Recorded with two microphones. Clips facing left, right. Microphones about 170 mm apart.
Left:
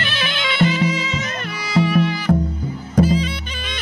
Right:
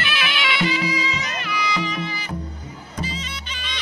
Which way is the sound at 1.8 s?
60° left (ahead or behind).